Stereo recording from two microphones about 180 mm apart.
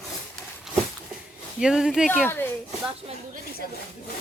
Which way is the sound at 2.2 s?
10° left (ahead or behind).